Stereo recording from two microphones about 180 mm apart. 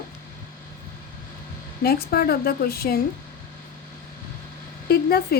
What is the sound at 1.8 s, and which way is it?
A woman's voice, 60° left (ahead or behind).